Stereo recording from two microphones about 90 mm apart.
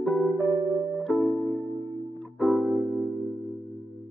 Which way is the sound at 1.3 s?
15° left (ahead or behind).